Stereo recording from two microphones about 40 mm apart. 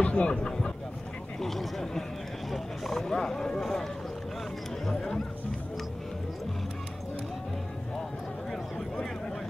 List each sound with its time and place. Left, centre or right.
0.0 s speech: left
0.4 s speech: left
1.4 s speech: centre